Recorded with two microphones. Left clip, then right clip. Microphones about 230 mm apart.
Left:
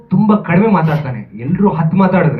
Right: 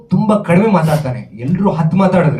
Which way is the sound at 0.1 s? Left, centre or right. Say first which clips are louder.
Right 1 dB; right.